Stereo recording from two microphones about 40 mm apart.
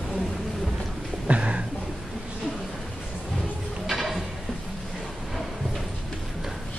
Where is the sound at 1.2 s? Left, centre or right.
Right.